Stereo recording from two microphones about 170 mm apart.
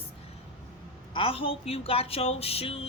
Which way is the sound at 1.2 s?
30° left (ahead or behind).